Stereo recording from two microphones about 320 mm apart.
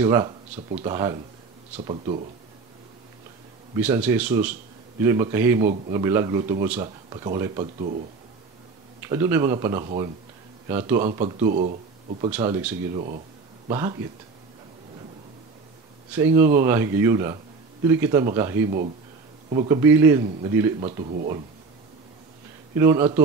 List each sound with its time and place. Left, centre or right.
0.0 s a man's voice: centre
3.7 s a man's voice: centre
9.0 s a man's voice: centre
9.8 s speech: centre
10.7 s a man's voice: centre
16.3 s a man's voice: centre
22.8 s a man's voice: centre